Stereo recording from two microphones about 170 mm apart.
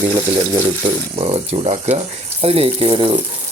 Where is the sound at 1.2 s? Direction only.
35° right (ahead or behind).